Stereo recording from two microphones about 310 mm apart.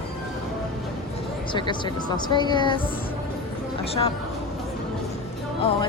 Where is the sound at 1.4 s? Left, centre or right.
Centre.